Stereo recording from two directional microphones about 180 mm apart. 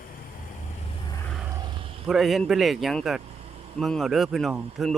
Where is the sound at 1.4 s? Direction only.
20° right (ahead or behind).